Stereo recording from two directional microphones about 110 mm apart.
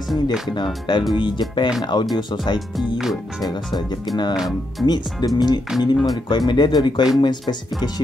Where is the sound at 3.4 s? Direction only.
40° left (ahead or behind).